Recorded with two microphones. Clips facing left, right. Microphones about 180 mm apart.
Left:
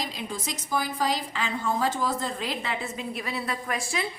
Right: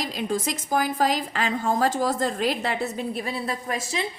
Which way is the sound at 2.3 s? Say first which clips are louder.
Right 6 dB; 45° right (ahead or behind).